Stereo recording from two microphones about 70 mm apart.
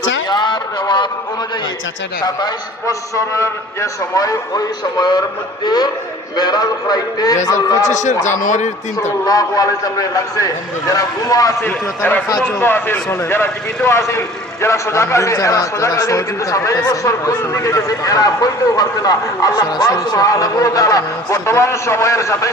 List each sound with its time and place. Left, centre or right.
0.3 s a sound: left
3.3 s a man's voice: left
5.6 s a man's voice: left
9.2 s a man's voice: left
11.6 s a man's voice: left